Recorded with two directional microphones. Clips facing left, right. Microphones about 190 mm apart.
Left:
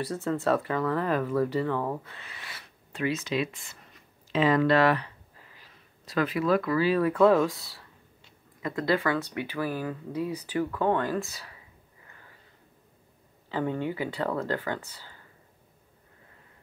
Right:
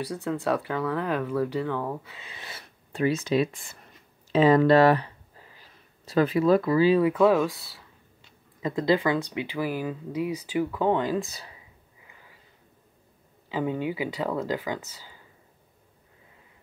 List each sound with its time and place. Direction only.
0.0 s speech: centre (ahead or behind)
2.1 s a sound: 20° right (ahead or behind)
4.3 s speech: 35° right (ahead or behind)
6.0 s speech: 30° right (ahead or behind)
7.2 s speech: centre (ahead or behind)
8.6 s speech: 20° right (ahead or behind)
13.5 s speech: 10° right (ahead or behind)